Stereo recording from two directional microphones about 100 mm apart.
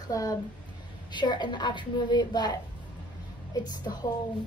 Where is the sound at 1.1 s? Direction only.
50° left (ahead or behind).